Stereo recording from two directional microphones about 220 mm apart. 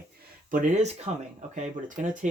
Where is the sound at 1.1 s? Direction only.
30° right (ahead or behind).